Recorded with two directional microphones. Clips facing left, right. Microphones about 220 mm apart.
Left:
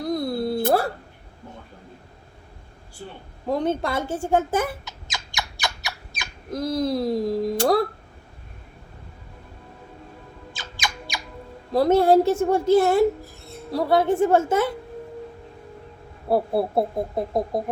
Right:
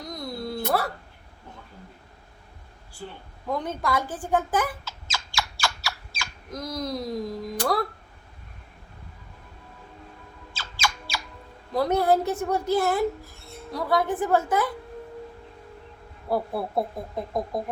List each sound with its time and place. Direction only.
0.1 s a sound: 30° left (ahead or behind)
3.4 s rodents: 30° left (ahead or behind)
6.5 s speech: 30° left (ahead or behind)
10.5 s music: 15° left (ahead or behind)
11.7 s speech: 30° left (ahead or behind)
16.3 s speech: 30° left (ahead or behind)